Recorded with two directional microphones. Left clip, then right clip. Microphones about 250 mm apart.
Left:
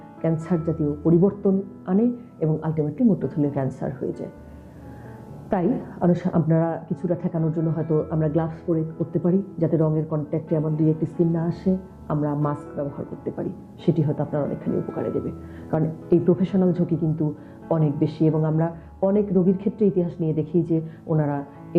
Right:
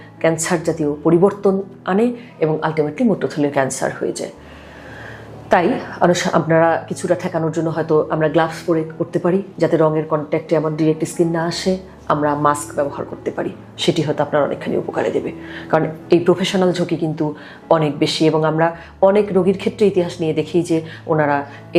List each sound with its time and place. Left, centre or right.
0.2 s speech: centre
0.9 s speech: centre
1.8 s speech: centre
5.5 s speech: centre